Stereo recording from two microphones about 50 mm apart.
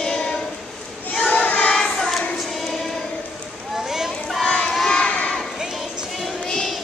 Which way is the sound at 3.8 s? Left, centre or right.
Centre.